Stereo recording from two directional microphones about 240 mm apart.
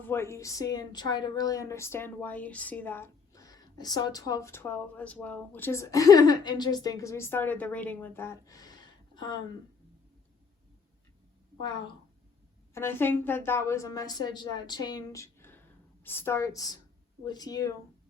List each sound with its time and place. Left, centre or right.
0.0 s a woman's voice: centre
12.7 s a woman's voice: centre